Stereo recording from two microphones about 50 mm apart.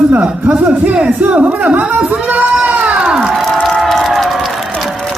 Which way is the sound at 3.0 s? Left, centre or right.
Centre.